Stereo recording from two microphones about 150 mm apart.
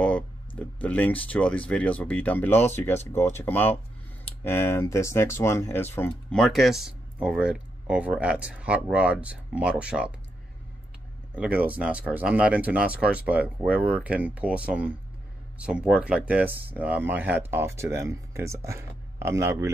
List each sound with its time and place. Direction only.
0.6 s speech: 10° left (ahead or behind); by 10.1 s 10° right (ahead or behind)
11.3 s speech: 10° right (ahead or behind)